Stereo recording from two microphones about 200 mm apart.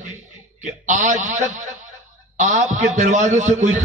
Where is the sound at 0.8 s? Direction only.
40° right (ahead or behind).